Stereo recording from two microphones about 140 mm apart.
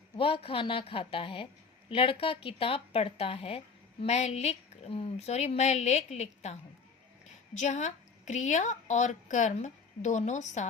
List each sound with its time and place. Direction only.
0.2 s a woman's voice: 40° left (ahead or behind); by 10.7 s 55° left (ahead or behind)